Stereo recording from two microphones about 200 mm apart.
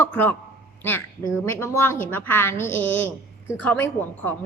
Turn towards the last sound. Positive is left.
turn(degrees=10)  # may be behind; listen again after turning